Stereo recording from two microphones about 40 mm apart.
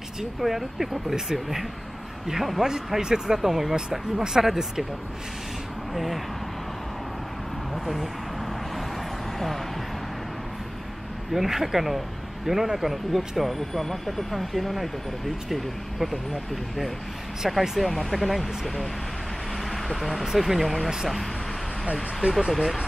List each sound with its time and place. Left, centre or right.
0.2 s speech: centre
5.9 s speech: centre
7.7 s speech: centre
11.3 s speech: centre
17.5 s speech: centre
19.6 s vehicle: centre
20.3 s speech: centre
22.5 s speech: centre